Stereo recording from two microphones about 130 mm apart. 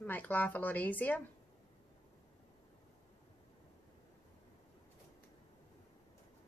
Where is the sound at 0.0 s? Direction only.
15° left (ahead or behind).